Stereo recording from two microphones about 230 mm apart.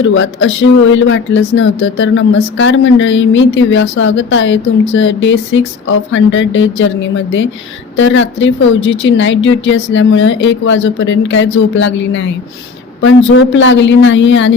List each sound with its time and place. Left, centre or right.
0.0 s speech: left